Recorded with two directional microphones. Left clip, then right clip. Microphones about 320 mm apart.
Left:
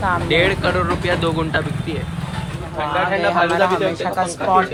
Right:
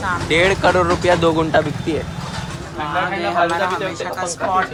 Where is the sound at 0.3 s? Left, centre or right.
Centre.